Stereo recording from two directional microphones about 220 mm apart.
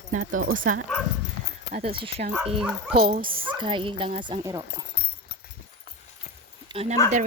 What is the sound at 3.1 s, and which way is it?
Speech, 40° right (ahead or behind).